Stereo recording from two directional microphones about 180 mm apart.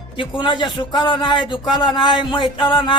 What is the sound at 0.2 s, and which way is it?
A man's voice, 25° left (ahead or behind).